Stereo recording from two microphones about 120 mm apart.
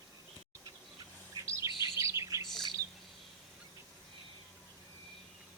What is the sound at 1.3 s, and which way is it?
Chirp, 25° right (ahead or behind).